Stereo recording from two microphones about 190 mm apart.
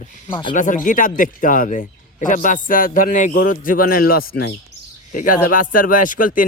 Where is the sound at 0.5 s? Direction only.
45° left (ahead or behind); by 4.5 s 60° left (ahead or behind).